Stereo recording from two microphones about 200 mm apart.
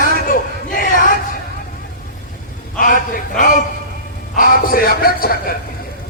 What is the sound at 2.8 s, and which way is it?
A man's voice, 45° left (ahead or behind).